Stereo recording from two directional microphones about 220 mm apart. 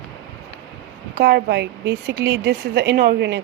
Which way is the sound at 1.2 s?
50° right (ahead or behind).